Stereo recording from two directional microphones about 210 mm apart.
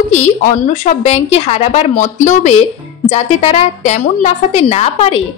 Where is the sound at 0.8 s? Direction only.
30° left (ahead or behind).